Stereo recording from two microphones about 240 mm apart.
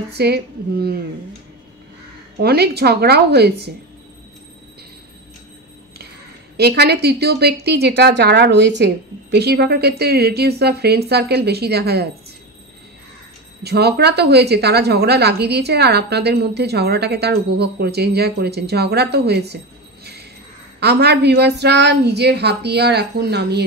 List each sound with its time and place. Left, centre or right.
0.1 s a woman's voice: right
2.3 s a woman's voice: right
6.5 s a woman's voice: right
13.6 s a woman's voice: right
20.8 s a woman's voice: right